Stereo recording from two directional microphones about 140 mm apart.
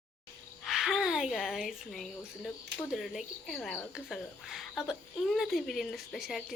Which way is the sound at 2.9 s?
Centre (ahead or behind).